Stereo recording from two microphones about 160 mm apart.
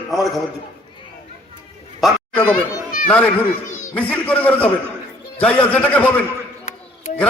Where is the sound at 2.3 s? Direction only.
10° left (ahead or behind).